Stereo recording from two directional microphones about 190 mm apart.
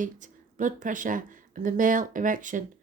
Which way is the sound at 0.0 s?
45° right (ahead or behind).